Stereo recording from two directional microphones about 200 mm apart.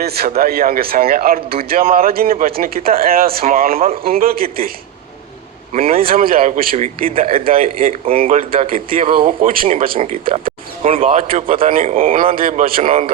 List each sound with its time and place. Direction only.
0.0 s speech: 50° right (ahead or behind)
5.7 s a man's voice: 30° right (ahead or behind)
6.0 s a man's voice: 45° right (ahead or behind)
7.3 s a man's voice: 30° right (ahead or behind)
7.5 s speech: 45° right (ahead or behind)
8.0 s a man's voice: 30° right (ahead or behind)
10.0 s a man's voice: 35° right (ahead or behind)
11.7 s a man's voice: 40° right (ahead or behind)